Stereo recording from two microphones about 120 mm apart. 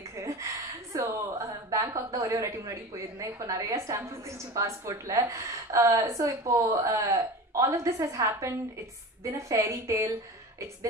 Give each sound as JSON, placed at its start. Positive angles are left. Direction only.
{"t": 0.1, "sound": "a woman's voice", "side_deg": -25}